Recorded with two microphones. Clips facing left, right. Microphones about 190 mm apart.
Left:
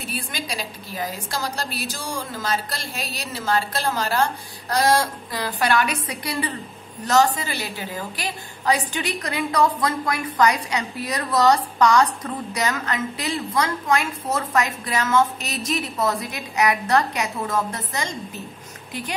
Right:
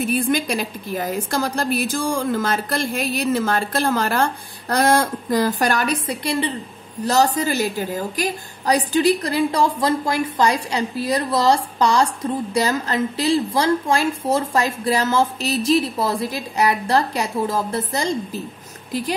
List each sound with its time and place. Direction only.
0.0 s a woman's voice: 50° right (ahead or behind)
6.0 s a woman's voice: 25° right (ahead or behind)
7.1 s a woman's voice: 40° right (ahead or behind)